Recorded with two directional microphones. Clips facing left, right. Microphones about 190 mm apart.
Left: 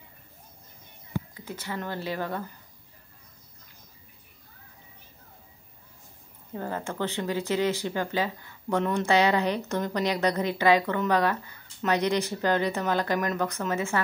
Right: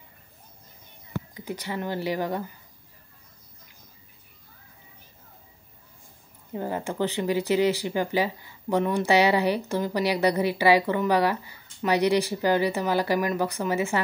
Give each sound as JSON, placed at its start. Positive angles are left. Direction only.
{"t": 1.3, "sound": "speech", "side_deg": -15}
{"t": 6.5, "sound": "speech", "side_deg": -15}